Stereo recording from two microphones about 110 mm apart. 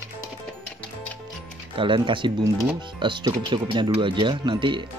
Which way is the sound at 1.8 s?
50° right (ahead or behind).